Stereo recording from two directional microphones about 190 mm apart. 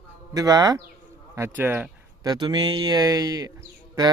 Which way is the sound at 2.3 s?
25° right (ahead or behind).